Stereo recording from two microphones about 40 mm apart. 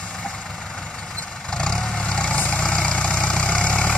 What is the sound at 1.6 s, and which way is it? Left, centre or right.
Vehicle, centre.